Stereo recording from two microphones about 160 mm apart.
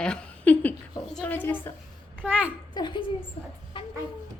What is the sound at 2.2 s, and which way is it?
Speech, 10° right (ahead or behind).